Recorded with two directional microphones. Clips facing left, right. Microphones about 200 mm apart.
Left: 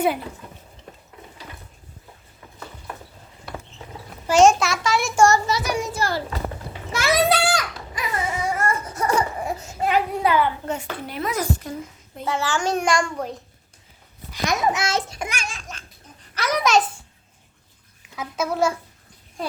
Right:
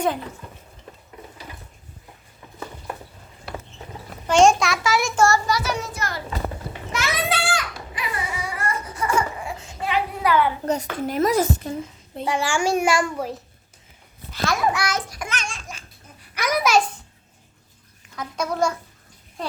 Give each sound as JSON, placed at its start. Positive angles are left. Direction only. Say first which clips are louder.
{"t": 4.3, "sound": "a child's voice", "louder": "left 1 dB", "side_deg": 5}
{"t": 5.1, "sound": "a child's voice", "louder": "left 4 dB", "side_deg": 15}
{"t": 5.9, "sound": "a sound", "louder": "left 4 dB", "side_deg": 30}
{"t": 10.3, "sound": "a woman's voice", "louder": "right 1 dB", "side_deg": 25}
{"t": 10.7, "sound": "a child's voice", "louder": "right 5 dB", "side_deg": -40}
{"t": 11.3, "sound": "a woman's voice", "louder": "right 4 dB", "side_deg": -25}
{"t": 12.2, "sound": "a child's voice", "louder": "right 1 dB", "side_deg": -15}
{"t": 14.3, "sound": "babbling", "louder": "even", "side_deg": 20}
{"t": 15.3, "sound": "laughter", "louder": "right 1 dB", "side_deg": 5}
{"t": 16.3, "sound": "babbling", "louder": "even", "side_deg": -10}
{"t": 18.2, "sound": "a child's voice", "louder": "left 1 dB", "side_deg": 5}